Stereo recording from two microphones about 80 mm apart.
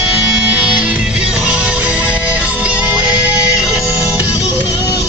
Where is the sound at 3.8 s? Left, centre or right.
Left.